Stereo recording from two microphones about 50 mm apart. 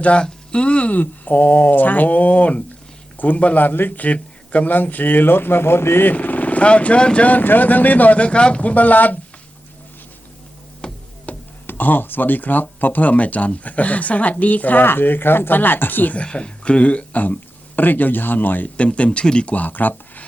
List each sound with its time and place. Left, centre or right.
0.0 s speech: left
6.1 s speech: left
7.3 s speech: left
10.8 s music: centre
11.3 s speech: left
16.1 s speech: left
18.8 s speech: left